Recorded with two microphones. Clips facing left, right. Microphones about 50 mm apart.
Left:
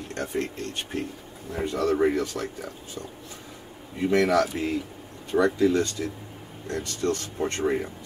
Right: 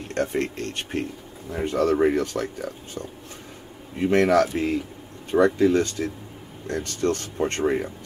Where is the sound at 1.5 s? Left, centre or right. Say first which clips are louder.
Right 3 dB; right.